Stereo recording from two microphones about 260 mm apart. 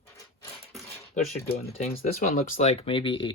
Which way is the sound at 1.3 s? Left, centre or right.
Left.